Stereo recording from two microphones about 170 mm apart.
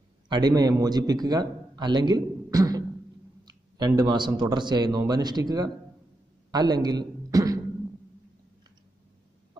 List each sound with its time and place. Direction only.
0.3 s a man's voice: 25° right (ahead or behind)